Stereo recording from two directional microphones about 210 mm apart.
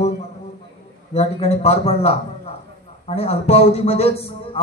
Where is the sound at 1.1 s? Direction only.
30° left (ahead or behind).